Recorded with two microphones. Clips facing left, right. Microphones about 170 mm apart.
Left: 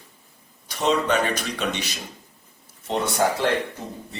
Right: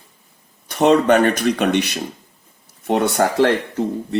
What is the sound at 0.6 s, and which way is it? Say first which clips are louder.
Speech: right 8 dB; 60° right (ahead or behind).